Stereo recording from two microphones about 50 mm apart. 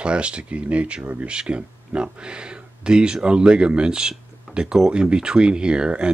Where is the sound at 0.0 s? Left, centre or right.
Right.